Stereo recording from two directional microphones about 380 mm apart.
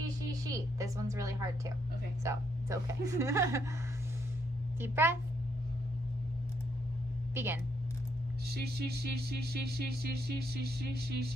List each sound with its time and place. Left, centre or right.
0.3 s a woman's voice: centre
4.8 s a woman's voice: centre
7.3 s a woman's voice: centre
8.4 s sine wave: right